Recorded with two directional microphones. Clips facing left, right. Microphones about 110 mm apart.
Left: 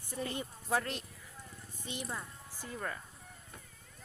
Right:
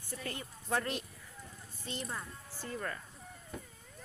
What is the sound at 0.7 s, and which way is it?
Speech, centre (ahead or behind).